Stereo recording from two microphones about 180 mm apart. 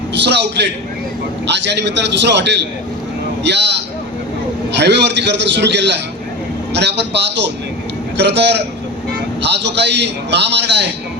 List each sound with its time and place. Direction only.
0.1 s a man's voice: 70° right (ahead or behind)